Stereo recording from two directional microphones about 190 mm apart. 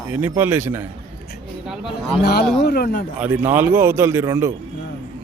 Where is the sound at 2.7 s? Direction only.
55° left (ahead or behind).